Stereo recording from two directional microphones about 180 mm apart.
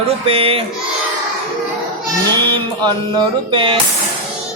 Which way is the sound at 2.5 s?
25° right (ahead or behind).